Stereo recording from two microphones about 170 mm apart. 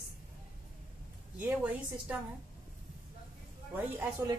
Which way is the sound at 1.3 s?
10° right (ahead or behind).